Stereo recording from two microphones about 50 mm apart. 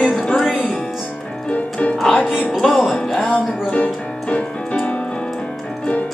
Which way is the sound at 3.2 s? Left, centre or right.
Left.